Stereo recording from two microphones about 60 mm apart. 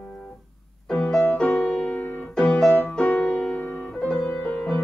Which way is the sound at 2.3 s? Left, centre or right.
Left.